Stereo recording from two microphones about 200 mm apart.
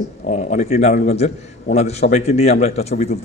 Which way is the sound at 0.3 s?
35° left (ahead or behind).